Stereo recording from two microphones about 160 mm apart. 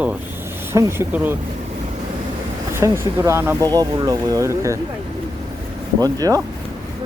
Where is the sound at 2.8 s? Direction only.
15° right (ahead or behind).